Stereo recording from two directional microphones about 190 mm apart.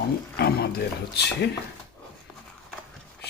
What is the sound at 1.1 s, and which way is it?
Speech, 60° left (ahead or behind).